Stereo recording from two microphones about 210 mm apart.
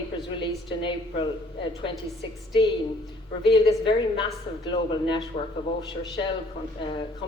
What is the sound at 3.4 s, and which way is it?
A woman's voice, 25° left (ahead or behind).